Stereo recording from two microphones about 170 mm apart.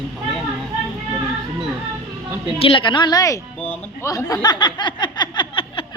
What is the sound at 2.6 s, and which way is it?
A woman's voice, 30° left (ahead or behind).